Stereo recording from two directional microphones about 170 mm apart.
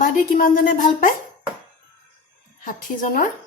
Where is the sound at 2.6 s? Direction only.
50° left (ahead or behind).